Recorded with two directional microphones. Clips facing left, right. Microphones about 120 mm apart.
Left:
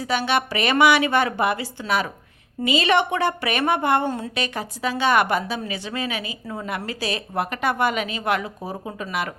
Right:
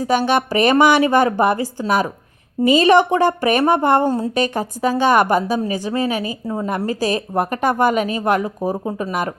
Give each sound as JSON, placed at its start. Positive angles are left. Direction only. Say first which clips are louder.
{"t": 0.0, "sound": "a woman's voice", "louder": "right 6 dB", "side_deg": -45}